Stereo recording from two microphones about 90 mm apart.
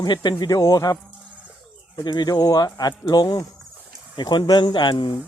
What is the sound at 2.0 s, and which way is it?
Speech, 50° left (ahead or behind).